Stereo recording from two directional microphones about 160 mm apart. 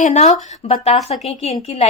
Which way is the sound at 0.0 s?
45° left (ahead or behind).